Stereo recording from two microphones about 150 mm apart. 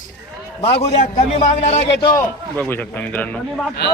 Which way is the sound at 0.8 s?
45° left (ahead or behind).